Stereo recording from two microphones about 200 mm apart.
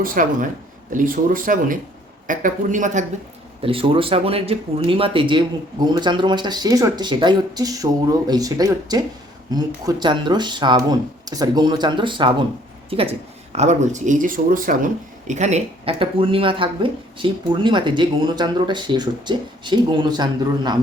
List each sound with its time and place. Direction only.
0.0 s speech: 45° right (ahead or behind)
3.6 s speech: 25° right (ahead or behind)